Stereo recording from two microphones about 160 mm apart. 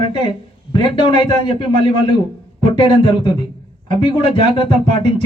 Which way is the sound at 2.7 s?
30° left (ahead or behind).